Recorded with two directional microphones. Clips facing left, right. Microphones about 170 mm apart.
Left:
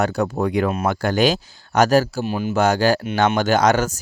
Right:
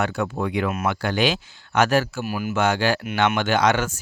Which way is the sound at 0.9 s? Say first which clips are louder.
Left 4 dB; 45° left (ahead or behind).